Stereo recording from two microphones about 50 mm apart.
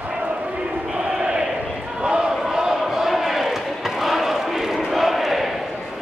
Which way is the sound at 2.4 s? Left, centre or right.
Centre.